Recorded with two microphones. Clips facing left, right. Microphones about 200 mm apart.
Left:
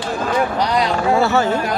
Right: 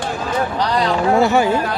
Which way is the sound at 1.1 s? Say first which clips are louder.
Right 2 dB; 15° right (ahead or behind).